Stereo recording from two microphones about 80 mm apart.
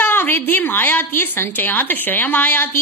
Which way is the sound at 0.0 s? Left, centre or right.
Left.